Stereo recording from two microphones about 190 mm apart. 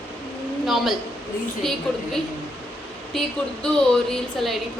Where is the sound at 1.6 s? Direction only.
Centre (ahead or behind).